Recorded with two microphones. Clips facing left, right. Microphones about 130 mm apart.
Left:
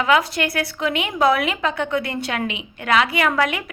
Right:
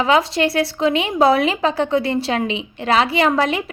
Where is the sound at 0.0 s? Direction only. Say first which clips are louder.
Right 3 dB; 30° right (ahead or behind).